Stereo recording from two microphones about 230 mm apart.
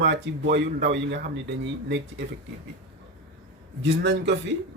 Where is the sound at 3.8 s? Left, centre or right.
Right.